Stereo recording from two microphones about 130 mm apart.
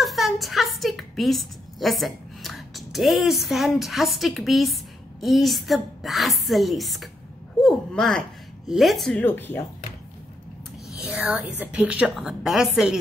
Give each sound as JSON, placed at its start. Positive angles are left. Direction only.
{"t": 0.0, "sound": "a woman's voice", "side_deg": 0}
{"t": 9.2, "sound": "speech", "side_deg": 15}
{"t": 11.1, "sound": "a woman's voice", "side_deg": -10}